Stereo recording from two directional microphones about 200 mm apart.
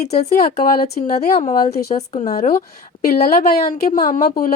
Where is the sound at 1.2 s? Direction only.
35° left (ahead or behind).